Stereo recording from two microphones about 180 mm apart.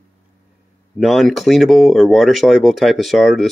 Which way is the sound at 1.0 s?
Centre (ahead or behind).